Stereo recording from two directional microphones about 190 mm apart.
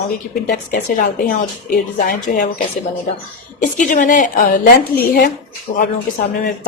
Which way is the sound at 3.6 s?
45° left (ahead or behind).